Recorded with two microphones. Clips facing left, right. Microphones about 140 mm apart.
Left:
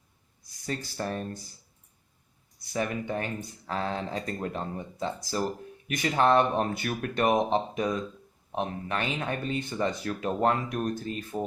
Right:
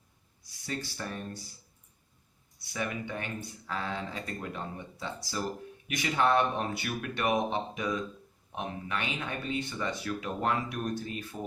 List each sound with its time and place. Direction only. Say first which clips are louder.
0.6 s speech: left 4 dB; 45° left (ahead or behind)
2.7 s speech: left 5 dB; 40° left (ahead or behind)